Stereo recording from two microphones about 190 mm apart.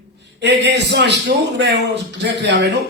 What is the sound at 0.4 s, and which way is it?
Speech, 65° right (ahead or behind).